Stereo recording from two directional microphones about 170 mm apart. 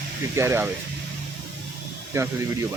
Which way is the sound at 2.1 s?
15° right (ahead or behind).